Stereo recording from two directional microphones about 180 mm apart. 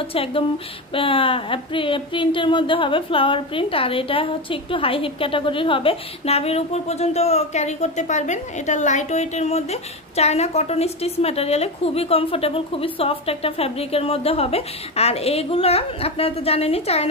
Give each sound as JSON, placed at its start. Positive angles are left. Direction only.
{"t": 0.0, "sound": "speech", "side_deg": 30}